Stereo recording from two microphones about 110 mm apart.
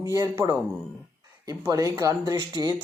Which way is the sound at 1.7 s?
30° right (ahead or behind).